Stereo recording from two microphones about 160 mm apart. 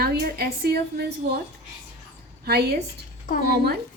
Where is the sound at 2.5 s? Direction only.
80° right.